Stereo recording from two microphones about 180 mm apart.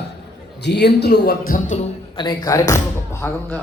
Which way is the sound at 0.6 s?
70° left (ahead or behind).